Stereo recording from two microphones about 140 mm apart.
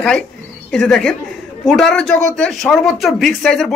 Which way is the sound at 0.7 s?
5° left (ahead or behind).